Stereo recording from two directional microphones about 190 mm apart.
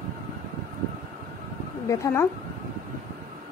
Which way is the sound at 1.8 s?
15° left (ahead or behind).